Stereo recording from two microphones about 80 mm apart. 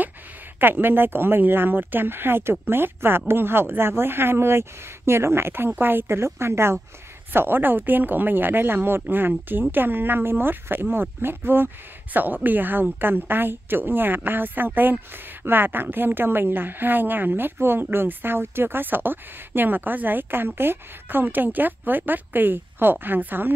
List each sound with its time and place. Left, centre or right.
0.6 s a woman's voice: right